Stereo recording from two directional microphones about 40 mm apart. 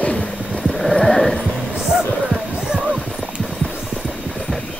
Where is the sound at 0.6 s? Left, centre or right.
Centre.